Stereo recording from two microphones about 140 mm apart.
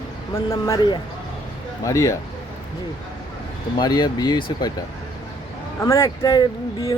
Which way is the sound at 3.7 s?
30° left (ahead or behind).